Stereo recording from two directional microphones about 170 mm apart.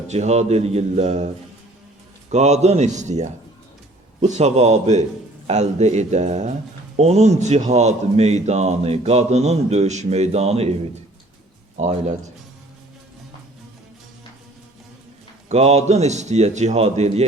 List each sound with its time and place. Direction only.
0.1 s speech: 40° right (ahead or behind)
2.3 s speech: 40° right (ahead or behind)
11.8 s speech: 45° right (ahead or behind)
15.4 s speech: 40° right (ahead or behind)